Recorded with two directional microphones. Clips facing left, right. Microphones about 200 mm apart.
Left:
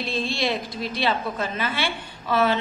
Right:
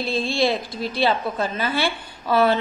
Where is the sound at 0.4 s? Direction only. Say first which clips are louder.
Right 4 dB; 35° right (ahead or behind).